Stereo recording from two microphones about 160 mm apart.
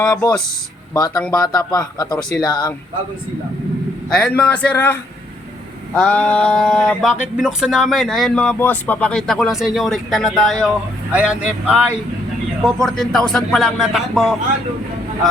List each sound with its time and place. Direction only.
0.0 s speech: 25° left (ahead or behind)
0.3 s a man's voice: 5° left (ahead or behind)
0.9 s speech: 25° left (ahead or behind)
4.2 s a man's voice: 10° left (ahead or behind); by 11.9 s 5° right (ahead or behind)
12.6 s a man's voice: 5° left (ahead or behind)